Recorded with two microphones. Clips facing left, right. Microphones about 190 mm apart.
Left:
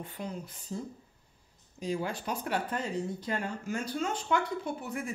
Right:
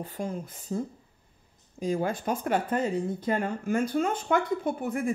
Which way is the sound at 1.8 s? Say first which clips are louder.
Right 5 dB; 50° right (ahead or behind).